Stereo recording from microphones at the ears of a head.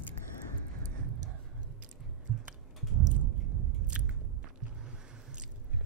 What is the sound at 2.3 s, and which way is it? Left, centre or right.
Chewing, right.